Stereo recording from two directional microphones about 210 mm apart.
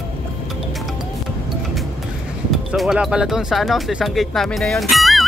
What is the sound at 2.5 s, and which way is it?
Speech, centre (ahead or behind).